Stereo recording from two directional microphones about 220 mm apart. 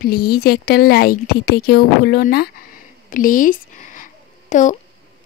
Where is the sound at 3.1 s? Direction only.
40° left (ahead or behind).